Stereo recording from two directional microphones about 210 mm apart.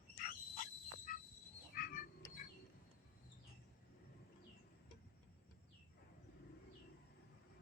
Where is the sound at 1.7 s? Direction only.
40° left (ahead or behind).